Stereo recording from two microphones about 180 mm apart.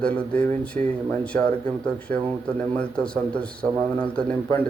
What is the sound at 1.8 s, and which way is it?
A man's voice, 5° left (ahead or behind).